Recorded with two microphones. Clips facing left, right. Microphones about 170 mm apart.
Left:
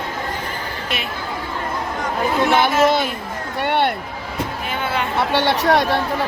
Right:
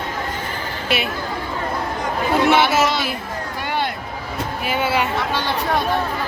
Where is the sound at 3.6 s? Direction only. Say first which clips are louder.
Left 6 dB; 65° left (ahead or behind).